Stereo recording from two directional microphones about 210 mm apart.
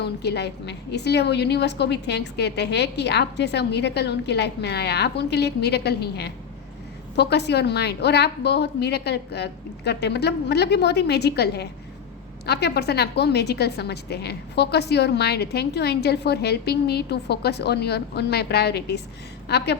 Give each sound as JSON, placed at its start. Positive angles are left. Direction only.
{"t": 0.0, "sound": "a woman's voice", "side_deg": 50}